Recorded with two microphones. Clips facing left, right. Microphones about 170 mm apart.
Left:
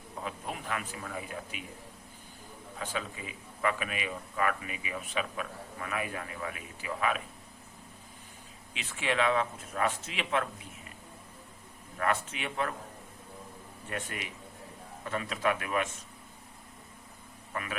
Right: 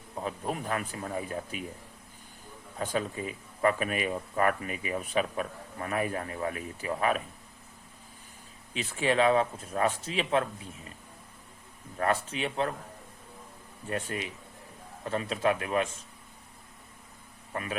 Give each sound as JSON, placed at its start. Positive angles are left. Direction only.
{"t": 0.3, "sound": "speech", "side_deg": -40}
{"t": 2.7, "sound": "speech", "side_deg": -40}
{"t": 8.7, "sound": "speech", "side_deg": -40}
{"t": 11.9, "sound": "speech", "side_deg": -35}
{"t": 13.9, "sound": "speech", "side_deg": -35}
{"t": 17.5, "sound": "speech", "side_deg": -30}